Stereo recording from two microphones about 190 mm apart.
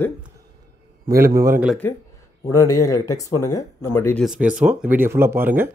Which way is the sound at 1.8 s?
15° left (ahead or behind).